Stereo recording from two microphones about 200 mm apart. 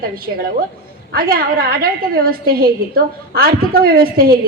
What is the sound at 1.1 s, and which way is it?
A woman's voice, 45° right (ahead or behind).